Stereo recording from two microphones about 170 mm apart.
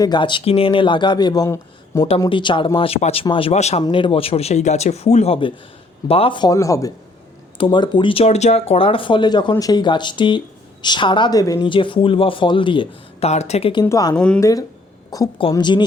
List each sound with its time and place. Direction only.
0.0 s speech: 25° left (ahead or behind)
3.8 s speech: 30° left (ahead or behind)
13.8 s speech: 20° left (ahead or behind)
14.2 s speech: 5° left (ahead or behind)
15.4 s speech: 30° left (ahead or behind)